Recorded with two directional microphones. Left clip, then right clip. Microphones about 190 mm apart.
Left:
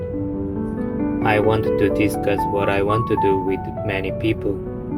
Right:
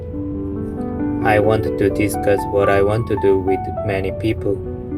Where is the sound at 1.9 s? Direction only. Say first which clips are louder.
Right 1 dB; 45° right (ahead or behind).